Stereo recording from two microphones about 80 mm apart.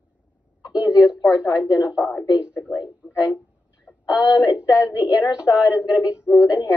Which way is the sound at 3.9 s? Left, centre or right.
Left.